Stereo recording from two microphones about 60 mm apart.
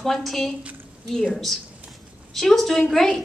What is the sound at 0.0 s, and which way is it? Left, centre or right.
A woman's voice, centre.